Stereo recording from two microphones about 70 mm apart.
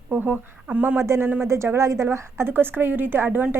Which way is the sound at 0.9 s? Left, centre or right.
Right.